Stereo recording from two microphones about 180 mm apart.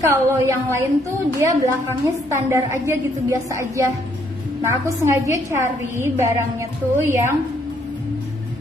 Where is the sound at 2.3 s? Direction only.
15° right (ahead or behind).